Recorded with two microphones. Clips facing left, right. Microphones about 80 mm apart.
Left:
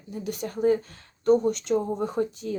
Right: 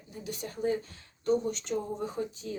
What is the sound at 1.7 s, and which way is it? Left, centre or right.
Speech, left.